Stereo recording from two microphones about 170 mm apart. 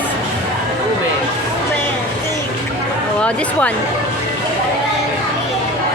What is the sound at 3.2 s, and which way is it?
Speech, 5° left (ahead or behind).